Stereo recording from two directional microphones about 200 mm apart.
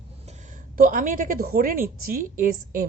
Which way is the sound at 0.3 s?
40° right (ahead or behind).